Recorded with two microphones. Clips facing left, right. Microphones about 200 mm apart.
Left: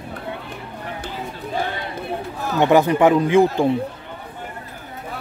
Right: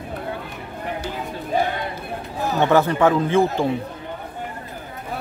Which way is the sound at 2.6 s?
15° left (ahead or behind).